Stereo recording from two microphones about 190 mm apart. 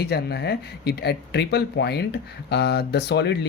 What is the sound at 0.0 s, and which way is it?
Speech, 55° left (ahead or behind).